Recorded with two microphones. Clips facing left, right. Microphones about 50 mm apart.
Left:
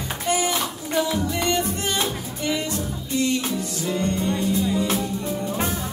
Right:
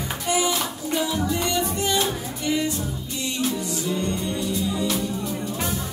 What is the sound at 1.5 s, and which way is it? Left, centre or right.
Music, left.